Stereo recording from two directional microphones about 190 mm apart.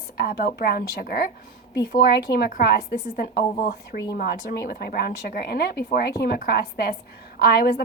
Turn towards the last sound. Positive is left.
turn(degrees=55)  # may be behind; listen again after turning